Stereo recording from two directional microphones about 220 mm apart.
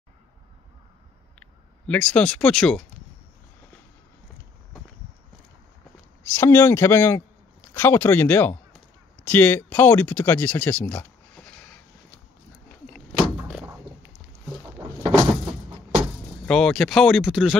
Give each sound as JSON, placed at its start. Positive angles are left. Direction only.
{"t": 1.9, "sound": "speech", "side_deg": 5}
{"t": 6.3, "sound": "speech", "side_deg": 10}
{"t": 13.5, "sound": "a sound", "side_deg": -5}
{"t": 14.8, "sound": "door", "side_deg": -15}
{"t": 16.4, "sound": "speech", "side_deg": 5}